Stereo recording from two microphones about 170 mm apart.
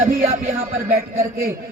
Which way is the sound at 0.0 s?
55° right (ahead or behind).